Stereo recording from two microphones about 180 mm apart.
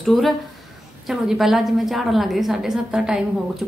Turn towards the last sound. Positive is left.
turn(degrees=-5)  # may be behind; listen again after turning